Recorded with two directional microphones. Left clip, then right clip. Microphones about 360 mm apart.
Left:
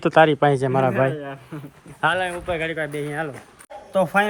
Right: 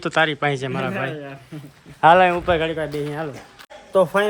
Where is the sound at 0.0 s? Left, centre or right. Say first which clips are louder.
Left 4 dB; centre.